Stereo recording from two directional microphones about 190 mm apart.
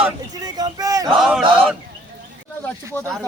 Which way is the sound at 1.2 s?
Centre (ahead or behind).